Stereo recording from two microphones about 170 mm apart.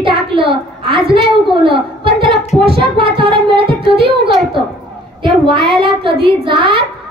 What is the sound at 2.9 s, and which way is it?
A child's voice, 30° right (ahead or behind).